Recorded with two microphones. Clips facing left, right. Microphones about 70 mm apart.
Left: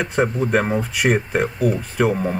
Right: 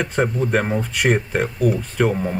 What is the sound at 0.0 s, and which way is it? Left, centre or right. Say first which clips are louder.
Speech: left 1 dB; centre.